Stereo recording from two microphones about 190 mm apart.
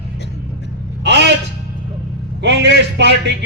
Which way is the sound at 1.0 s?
65° right (ahead or behind).